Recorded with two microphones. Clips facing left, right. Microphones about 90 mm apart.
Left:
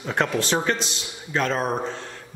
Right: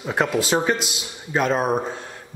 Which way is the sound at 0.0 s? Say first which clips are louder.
Right 2 dB; 5° right (ahead or behind).